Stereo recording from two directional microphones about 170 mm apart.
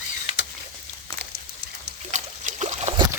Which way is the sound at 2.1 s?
45° right (ahead or behind).